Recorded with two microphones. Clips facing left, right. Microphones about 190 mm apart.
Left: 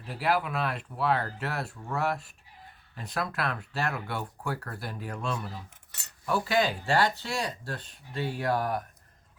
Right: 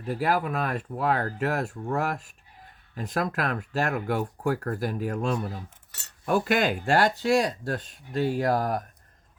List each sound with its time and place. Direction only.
0.0 s speech: 45° right (ahead or behind)